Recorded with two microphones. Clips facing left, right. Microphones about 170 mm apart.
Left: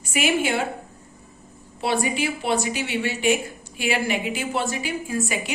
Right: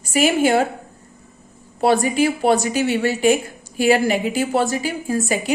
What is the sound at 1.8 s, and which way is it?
A woman's voice, 45° right (ahead or behind).